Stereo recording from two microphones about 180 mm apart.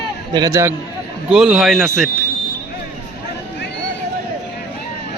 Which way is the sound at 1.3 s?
5° right (ahead or behind).